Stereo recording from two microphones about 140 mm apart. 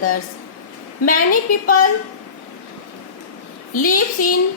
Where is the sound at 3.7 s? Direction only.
75° left (ahead or behind).